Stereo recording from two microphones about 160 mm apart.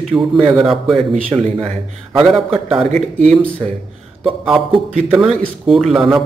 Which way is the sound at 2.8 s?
45° right (ahead or behind).